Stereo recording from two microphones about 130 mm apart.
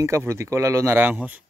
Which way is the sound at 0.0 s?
20° right (ahead or behind).